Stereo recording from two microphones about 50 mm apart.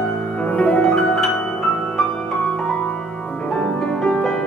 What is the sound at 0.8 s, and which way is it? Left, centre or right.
Music, centre.